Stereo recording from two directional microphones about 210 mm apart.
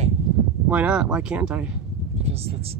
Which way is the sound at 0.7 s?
5° right (ahead or behind).